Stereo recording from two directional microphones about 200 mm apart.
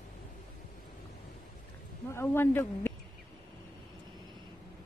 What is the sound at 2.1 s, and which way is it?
Speech, 10° left (ahead or behind).